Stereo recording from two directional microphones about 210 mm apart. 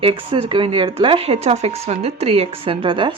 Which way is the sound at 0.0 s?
25° right (ahead or behind).